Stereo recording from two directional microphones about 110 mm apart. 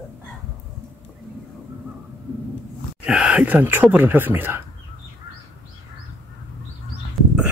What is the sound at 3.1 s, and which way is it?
Speech, 10° right (ahead or behind).